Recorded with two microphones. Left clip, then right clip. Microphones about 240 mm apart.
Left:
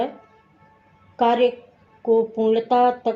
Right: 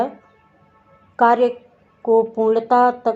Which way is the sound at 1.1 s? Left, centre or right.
Right.